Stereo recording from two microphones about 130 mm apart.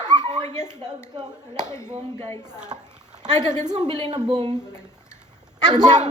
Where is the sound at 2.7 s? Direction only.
40° right (ahead or behind).